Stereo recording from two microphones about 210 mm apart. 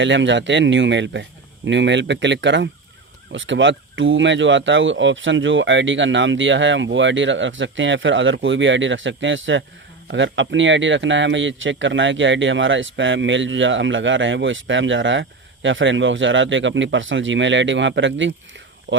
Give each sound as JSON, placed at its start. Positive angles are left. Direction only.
{"t": 0.0, "sound": "speech", "side_deg": -60}